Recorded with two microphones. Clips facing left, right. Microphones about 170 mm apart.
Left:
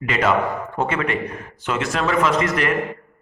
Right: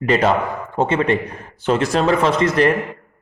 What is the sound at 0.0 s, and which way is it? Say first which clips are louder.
A man's voice: right 3 dB; 35° right (ahead or behind).